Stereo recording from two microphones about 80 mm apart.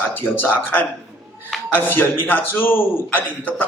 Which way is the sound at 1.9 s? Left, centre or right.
Left.